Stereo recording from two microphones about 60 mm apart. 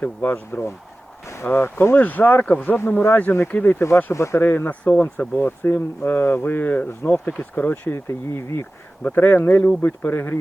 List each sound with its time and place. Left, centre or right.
0.0 s speech: left
1.5 s speech: left
3.8 s speech: left
4.4 s speech: left
9.0 s speech: left